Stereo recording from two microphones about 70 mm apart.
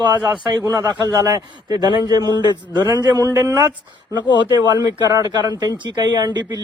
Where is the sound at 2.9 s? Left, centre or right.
Right.